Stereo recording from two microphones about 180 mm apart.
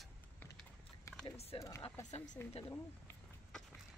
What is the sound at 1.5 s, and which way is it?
Speech, 30° left (ahead or behind).